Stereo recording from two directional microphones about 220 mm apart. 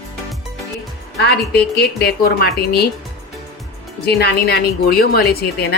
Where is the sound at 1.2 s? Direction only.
45° left (ahead or behind).